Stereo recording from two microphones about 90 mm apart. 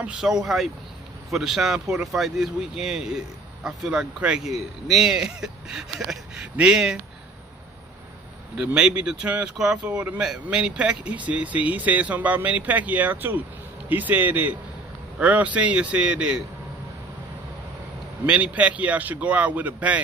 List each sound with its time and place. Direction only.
0.0 s speech: 10° right (ahead or behind)
8.5 s speech: 10° right (ahead or behind)
18.2 s speech: 15° right (ahead or behind)